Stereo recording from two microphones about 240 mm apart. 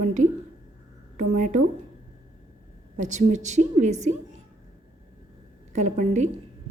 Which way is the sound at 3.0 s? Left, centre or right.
Right.